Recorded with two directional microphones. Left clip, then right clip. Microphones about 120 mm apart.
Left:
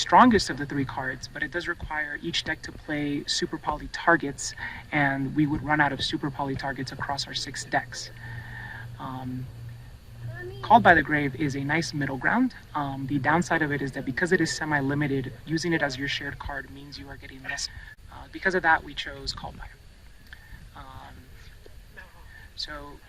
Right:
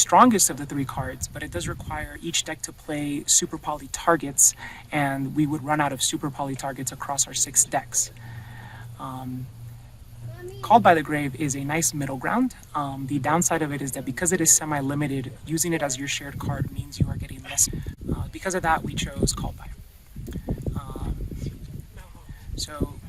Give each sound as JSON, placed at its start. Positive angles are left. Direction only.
{"t": 0.0, "sound": "speech", "side_deg": -45}
{"t": 8.5, "sound": "a sound", "side_deg": -40}
{"t": 10.6, "sound": "speech", "side_deg": -40}